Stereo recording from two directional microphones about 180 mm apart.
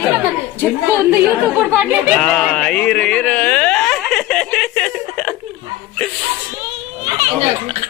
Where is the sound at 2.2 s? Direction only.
5° left (ahead or behind).